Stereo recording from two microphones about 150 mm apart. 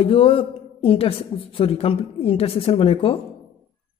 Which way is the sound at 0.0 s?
40° left (ahead or behind).